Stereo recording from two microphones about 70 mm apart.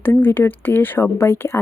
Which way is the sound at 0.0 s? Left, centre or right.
Left.